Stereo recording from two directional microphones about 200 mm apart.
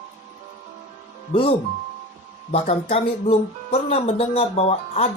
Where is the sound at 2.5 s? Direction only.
30° left (ahead or behind).